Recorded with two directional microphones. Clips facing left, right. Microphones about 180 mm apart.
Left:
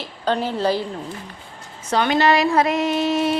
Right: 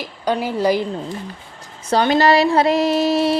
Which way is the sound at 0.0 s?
10° right (ahead or behind).